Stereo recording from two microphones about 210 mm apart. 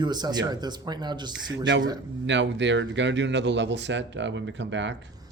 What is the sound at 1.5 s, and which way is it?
Speech, 60° right (ahead or behind).